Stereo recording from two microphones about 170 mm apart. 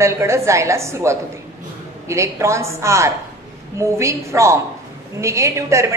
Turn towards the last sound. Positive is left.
turn(degrees=-15)  # may be behind; listen again after turning